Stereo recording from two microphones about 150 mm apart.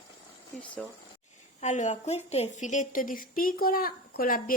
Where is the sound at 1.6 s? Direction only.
50° left (ahead or behind).